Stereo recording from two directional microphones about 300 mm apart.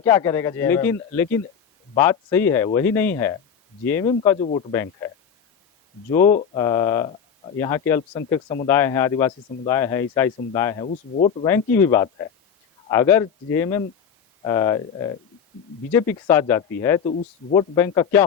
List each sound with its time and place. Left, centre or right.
0.0 s speech: centre
4.1 s speech: centre
6.1 s speech: left
10.8 s speech: left
11.4 s speech: centre